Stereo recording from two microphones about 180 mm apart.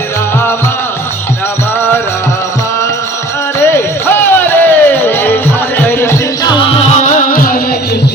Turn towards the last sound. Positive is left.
turn(degrees=50)  # may be behind; listen again after turning